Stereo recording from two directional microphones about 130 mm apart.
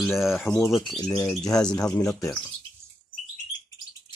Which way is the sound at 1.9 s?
25° left (ahead or behind).